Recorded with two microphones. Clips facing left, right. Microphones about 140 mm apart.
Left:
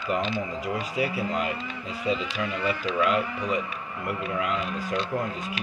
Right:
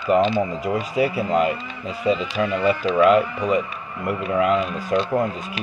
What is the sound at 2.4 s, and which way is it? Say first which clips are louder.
Speech: right 8 dB; 50° right (ahead or behind).